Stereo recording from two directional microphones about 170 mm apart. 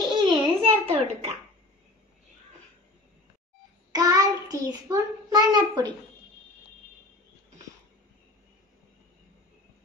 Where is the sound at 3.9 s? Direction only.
20° right (ahead or behind).